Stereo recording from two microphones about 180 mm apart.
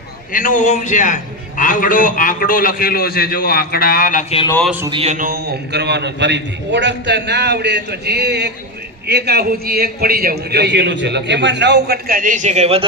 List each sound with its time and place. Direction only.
0.3 s a man's voice: 45° left (ahead or behind)
4.9 s a man's voice: 30° right (ahead or behind)
5.1 s a man's voice: 55° right (ahead or behind); by 12.8 s 35° right (ahead or behind)